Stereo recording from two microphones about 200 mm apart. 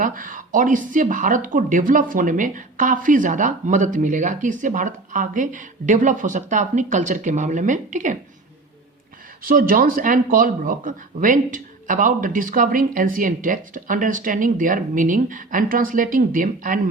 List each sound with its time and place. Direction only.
0.0 s speech: 45° right (ahead or behind)
9.4 s speech: 45° right (ahead or behind)